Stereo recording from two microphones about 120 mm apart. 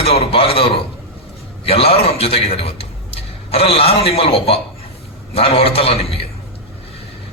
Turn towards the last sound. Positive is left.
turn(degrees=55)  # may be behind; listen again after turning